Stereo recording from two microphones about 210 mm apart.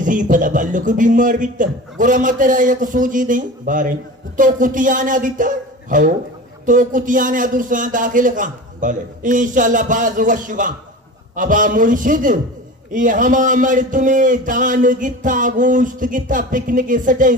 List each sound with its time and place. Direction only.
0.0 s speech: 40° right (ahead or behind)